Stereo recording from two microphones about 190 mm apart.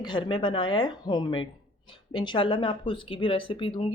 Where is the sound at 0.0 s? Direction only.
25° left (ahead or behind).